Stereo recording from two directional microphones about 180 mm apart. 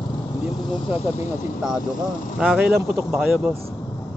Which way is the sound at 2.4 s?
5° right (ahead or behind).